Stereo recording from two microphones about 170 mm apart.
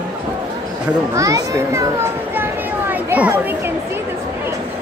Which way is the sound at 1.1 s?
20° right (ahead or behind).